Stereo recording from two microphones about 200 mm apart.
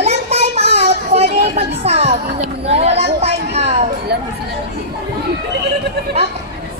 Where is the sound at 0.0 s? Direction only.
30° right (ahead or behind).